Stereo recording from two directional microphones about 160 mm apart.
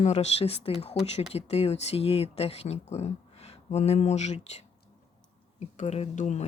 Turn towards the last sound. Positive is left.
turn(degrees=45)  # may be behind; listen again after turning